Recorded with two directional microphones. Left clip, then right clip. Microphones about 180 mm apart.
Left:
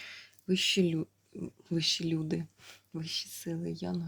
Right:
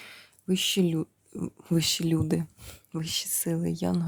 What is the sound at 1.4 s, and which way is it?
Speech, 45° right (ahead or behind).